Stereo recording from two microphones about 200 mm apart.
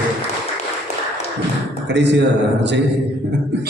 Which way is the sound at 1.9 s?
60° right (ahead or behind).